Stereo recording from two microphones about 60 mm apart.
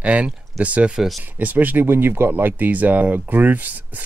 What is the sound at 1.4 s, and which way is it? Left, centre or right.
Speech, right.